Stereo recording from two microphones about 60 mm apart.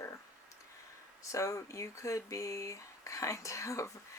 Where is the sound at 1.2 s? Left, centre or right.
Left.